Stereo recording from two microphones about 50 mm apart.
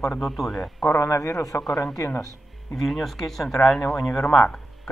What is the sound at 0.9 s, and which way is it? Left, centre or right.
Speech, left.